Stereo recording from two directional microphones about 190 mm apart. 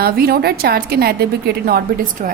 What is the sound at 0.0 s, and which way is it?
A woman's voice, 55° right (ahead or behind).